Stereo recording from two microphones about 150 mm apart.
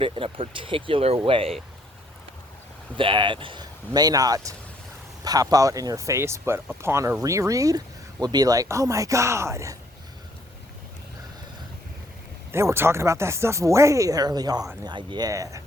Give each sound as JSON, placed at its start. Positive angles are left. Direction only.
{"t": 0.0, "sound": "speech", "side_deg": -35}
{"t": 3.0, "sound": "speech", "side_deg": -35}
{"t": 12.5, "sound": "speech", "side_deg": -15}